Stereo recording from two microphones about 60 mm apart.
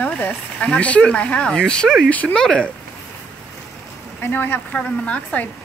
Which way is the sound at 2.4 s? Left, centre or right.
Centre.